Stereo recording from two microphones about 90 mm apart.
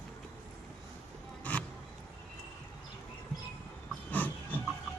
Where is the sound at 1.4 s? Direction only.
15° left (ahead or behind).